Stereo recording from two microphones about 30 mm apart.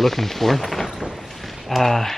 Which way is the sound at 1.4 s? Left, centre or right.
Centre.